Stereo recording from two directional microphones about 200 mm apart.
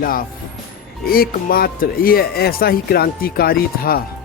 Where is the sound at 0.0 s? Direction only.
45° left (ahead or behind).